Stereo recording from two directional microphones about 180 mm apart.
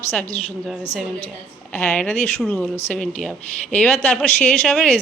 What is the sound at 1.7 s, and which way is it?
Speech, 10° left (ahead or behind).